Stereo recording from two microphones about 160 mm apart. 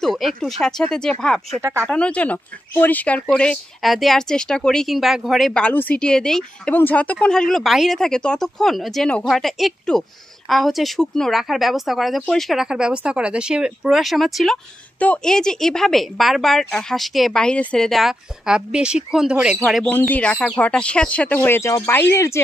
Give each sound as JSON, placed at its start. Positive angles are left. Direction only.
{"t": 0.0, "sound": "speech", "side_deg": 0}
{"t": 1.6, "sound": "speech", "side_deg": -15}
{"t": 1.9, "sound": "speech", "side_deg": 5}
{"t": 19.9, "sound": "speech", "side_deg": 10}